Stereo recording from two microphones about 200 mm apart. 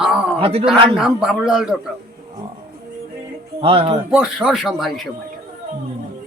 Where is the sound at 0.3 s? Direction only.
25° right (ahead or behind).